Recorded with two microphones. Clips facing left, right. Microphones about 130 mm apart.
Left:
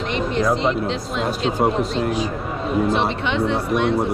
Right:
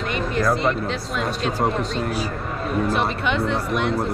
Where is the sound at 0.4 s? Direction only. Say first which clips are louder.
Left 1 dB; 20° left (ahead or behind).